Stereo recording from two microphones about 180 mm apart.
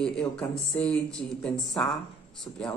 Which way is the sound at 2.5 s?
15° left (ahead or behind).